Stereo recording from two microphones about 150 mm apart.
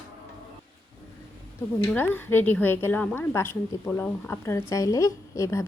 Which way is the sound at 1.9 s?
15° left (ahead or behind).